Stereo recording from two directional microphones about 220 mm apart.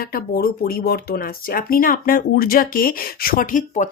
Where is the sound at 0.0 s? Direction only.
45° left (ahead or behind).